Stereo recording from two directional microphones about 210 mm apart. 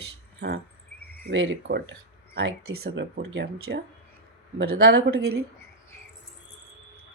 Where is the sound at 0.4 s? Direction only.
60° right (ahead or behind).